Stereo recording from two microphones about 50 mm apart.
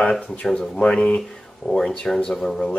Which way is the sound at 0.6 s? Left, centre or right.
Centre.